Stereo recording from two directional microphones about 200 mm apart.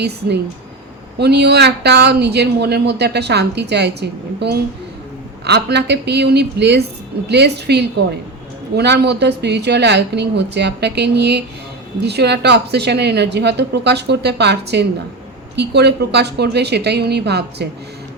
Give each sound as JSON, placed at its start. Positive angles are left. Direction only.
{"t": 1.2, "sound": "speech", "side_deg": -55}